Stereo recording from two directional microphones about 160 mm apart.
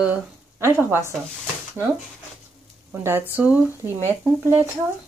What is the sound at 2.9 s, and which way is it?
Speech, 15° right (ahead or behind).